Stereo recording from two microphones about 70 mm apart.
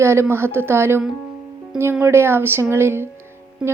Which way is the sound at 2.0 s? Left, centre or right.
Right.